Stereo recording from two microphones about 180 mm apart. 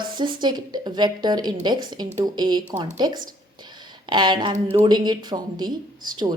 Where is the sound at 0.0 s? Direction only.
25° right (ahead or behind).